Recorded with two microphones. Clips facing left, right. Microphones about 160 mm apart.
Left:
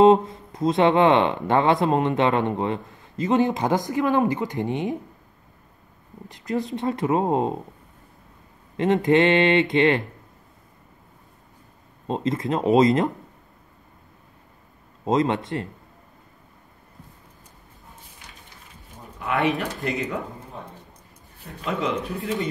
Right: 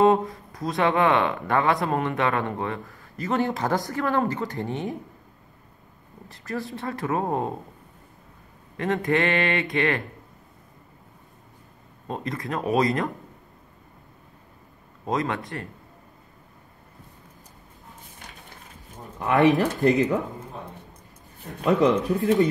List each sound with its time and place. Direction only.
0.0 s speech: 20° left (ahead or behind)
6.2 s speech: 20° left (ahead or behind)
8.7 s speech: 20° left (ahead or behind)
12.1 s speech: 20° left (ahead or behind)
15.0 s speech: 20° left (ahead or behind)
19.1 s speech: 40° right (ahead or behind)
21.6 s speech: 40° right (ahead or behind)